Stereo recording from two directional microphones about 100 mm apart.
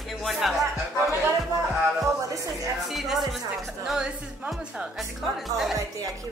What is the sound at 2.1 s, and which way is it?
Music, 35° right (ahead or behind).